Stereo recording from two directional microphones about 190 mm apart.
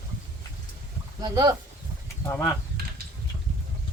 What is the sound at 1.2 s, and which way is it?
Speech, 20° right (ahead or behind).